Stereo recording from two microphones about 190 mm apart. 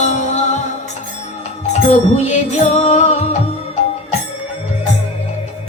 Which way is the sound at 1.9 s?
35° left (ahead or behind).